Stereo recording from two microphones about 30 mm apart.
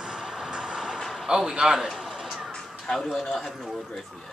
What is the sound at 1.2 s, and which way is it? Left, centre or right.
Speech, right.